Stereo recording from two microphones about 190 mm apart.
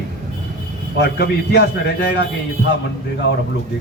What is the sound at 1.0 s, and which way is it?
Speech, 60° left (ahead or behind).